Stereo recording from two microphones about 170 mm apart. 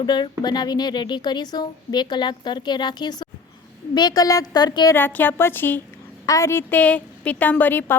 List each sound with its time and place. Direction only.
0.0 s a woman's voice: 25° left (ahead or behind)
4.9 s a woman's voice: 10° left (ahead or behind)